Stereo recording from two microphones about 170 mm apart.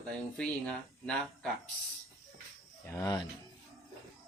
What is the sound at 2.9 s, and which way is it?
Speech, 20° left (ahead or behind).